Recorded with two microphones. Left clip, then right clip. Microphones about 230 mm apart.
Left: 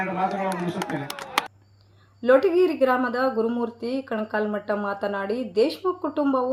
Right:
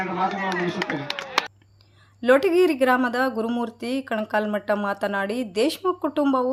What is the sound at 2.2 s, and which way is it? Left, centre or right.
Speech, right.